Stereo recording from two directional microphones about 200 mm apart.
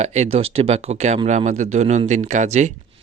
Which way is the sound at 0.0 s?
35° right (ahead or behind).